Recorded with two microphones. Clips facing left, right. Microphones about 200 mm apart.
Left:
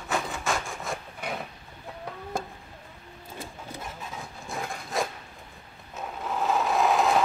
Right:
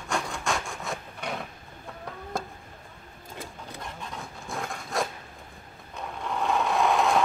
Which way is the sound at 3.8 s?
5° left (ahead or behind).